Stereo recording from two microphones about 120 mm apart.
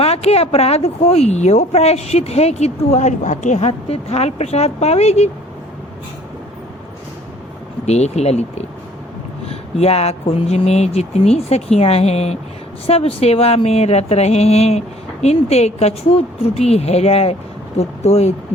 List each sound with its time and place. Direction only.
0.0 s speech: 60° left (ahead or behind)
7.9 s speech: 65° left (ahead or behind)